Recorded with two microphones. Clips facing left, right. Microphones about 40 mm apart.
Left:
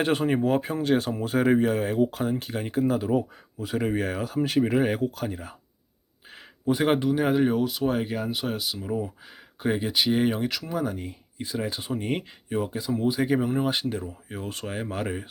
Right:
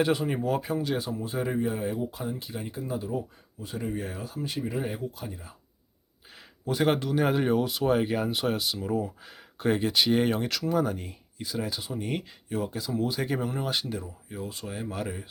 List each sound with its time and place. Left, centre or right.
0.0 s speech: left
2.8 s speech: left
6.3 s a sound: left
6.8 s speech: centre
7.2 s speech: centre
11.3 s speech: left
13.1 s speech: centre
13.5 s speech: left
13.8 s speech: left